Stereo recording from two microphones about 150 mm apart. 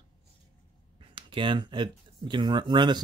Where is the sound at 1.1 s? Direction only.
35° right (ahead or behind).